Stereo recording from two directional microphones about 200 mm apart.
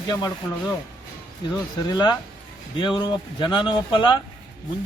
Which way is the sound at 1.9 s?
20° left (ahead or behind).